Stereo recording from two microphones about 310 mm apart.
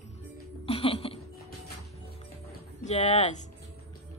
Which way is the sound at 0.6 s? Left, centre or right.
Centre.